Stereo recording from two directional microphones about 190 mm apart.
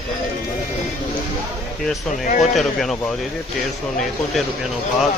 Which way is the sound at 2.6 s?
Centre (ahead or behind).